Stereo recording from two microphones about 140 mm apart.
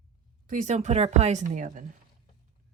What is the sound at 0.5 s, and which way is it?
Speech, 55° right (ahead or behind).